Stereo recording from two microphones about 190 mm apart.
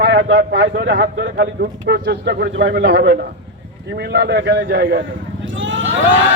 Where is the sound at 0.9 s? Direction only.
50° right (ahead or behind).